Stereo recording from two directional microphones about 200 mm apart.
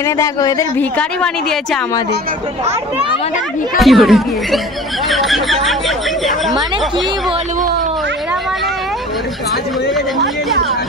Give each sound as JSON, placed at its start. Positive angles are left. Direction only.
{"t": 0.0, "sound": "a woman's voice", "side_deg": 15}
{"t": 2.6, "sound": "speech", "side_deg": -30}
{"t": 3.7, "sound": "speech", "side_deg": 0}